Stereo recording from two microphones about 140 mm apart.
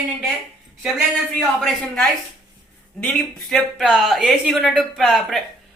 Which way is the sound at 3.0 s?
5° left (ahead or behind).